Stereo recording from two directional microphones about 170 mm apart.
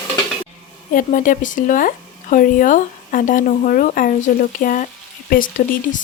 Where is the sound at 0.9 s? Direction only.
50° left (ahead or behind).